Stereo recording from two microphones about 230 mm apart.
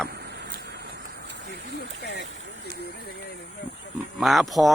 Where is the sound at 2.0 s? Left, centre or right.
Left.